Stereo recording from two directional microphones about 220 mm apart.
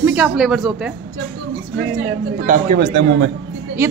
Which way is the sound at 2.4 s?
40° right (ahead or behind).